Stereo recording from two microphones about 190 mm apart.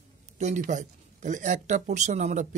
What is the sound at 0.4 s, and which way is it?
Speech, 40° right (ahead or behind).